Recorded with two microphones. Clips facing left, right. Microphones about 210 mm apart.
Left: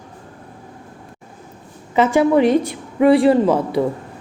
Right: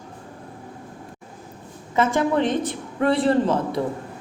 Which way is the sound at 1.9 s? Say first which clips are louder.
Left 6 dB; 75° left (ahead or behind).